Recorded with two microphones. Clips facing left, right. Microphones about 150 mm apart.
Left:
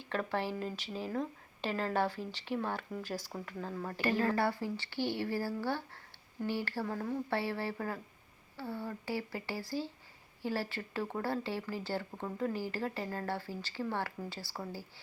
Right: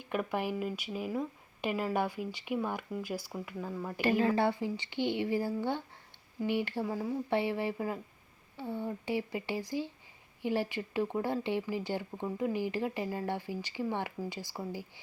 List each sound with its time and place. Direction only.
0.0 s speech: 15° right (ahead or behind)